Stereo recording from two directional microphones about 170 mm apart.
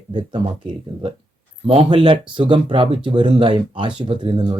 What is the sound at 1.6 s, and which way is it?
Speech, 30° right (ahead or behind).